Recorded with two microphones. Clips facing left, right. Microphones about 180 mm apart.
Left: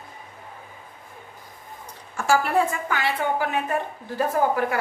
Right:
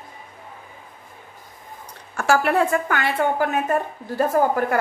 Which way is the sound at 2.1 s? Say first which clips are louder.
Right 2 dB; 65° right (ahead or behind).